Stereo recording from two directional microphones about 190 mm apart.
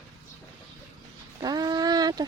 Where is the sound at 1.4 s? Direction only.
20° right (ahead or behind).